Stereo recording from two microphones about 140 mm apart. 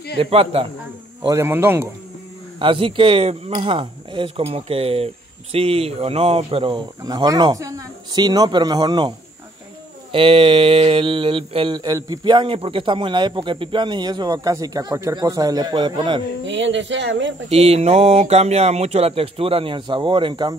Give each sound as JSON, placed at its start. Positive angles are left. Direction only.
{"t": 0.2, "sound": "speech", "side_deg": -45}
{"t": 1.2, "sound": "speech", "side_deg": -20}
{"t": 2.6, "sound": "speech", "side_deg": -40}
{"t": 7.0, "sound": "speech", "side_deg": -25}
{"t": 10.1, "sound": "speech", "side_deg": -40}
{"t": 17.5, "sound": "speech", "side_deg": -45}